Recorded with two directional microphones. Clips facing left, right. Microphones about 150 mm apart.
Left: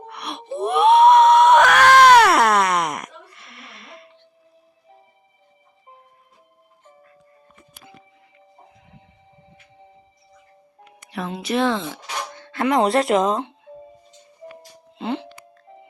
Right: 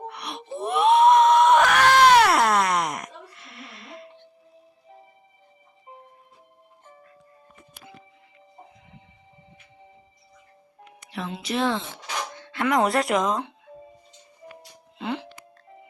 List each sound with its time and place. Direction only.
0.1 s screaming: 60° left (ahead or behind)
11.0 s a woman's voice: 50° left (ahead or behind); by 11.8 s 65° left (ahead or behind)
12.6 s speech: 25° left (ahead or behind)
14.9 s music: 30° left (ahead or behind)